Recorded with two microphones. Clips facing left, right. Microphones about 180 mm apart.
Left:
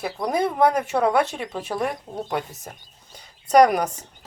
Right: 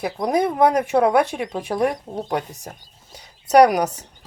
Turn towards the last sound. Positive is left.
turn(degrees=-10)  # may be behind; listen again after turning